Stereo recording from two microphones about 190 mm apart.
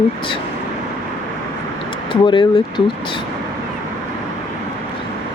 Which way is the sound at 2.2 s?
25° left (ahead or behind).